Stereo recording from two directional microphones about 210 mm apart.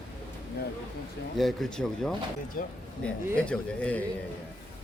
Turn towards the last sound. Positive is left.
turn(degrees=5)  # may be behind; listen again after turning